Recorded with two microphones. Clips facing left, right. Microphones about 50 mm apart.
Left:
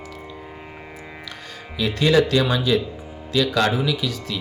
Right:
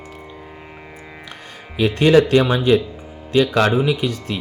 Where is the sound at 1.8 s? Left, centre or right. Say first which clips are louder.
Right 5 dB; right.